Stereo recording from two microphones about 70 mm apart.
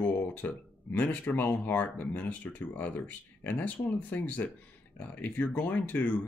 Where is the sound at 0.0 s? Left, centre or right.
Left.